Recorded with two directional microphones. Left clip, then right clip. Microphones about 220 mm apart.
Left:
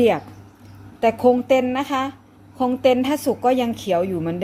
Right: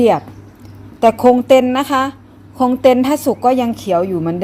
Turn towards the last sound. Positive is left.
turn(degrees=-5)  # may be behind; listen again after turning